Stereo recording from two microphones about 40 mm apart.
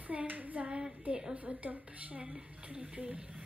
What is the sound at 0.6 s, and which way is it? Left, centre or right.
Speech, right.